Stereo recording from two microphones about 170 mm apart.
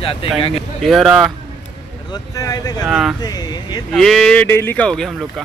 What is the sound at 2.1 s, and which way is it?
Speech, 20° left (ahead or behind).